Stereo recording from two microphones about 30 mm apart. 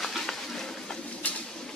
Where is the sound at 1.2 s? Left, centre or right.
Left.